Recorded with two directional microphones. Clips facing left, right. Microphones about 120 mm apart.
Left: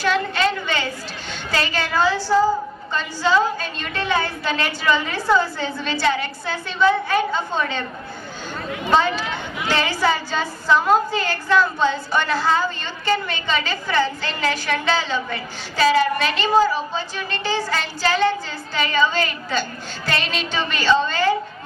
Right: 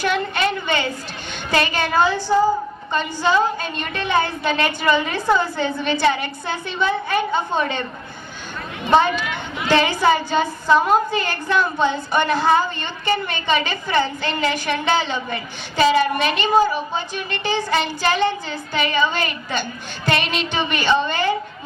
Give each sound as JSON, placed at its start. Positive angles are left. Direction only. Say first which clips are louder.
{"t": 0.0, "sound": "a sound", "louder": "even", "side_deg": -20}
{"t": 1.3, "sound": "a woman's voice", "louder": "right 3 dB", "side_deg": -20}
{"t": 8.9, "sound": "a woman's voice", "louder": "right 2 dB", "side_deg": -20}